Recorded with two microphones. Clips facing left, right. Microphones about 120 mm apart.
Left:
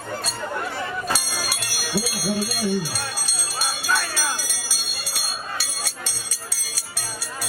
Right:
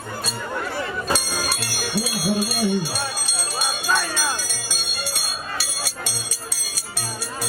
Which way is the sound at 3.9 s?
20° right (ahead or behind).